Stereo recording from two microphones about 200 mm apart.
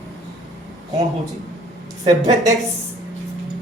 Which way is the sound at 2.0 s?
20° right (ahead or behind).